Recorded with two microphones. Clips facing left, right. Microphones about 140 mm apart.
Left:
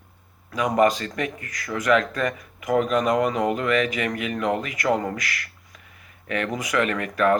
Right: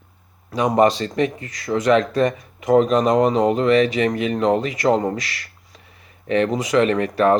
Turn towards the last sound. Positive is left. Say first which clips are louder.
# right 5 dB
turn(degrees=-25)  # may be behind; listen again after turning